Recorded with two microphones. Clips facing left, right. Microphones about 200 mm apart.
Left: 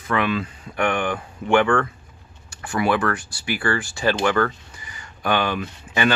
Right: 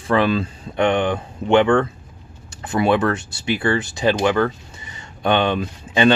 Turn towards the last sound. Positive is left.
turn(degrees=-25)  # may be behind; listen again after turning